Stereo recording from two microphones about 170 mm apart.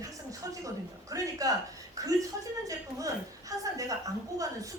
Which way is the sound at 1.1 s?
20° right (ahead or behind).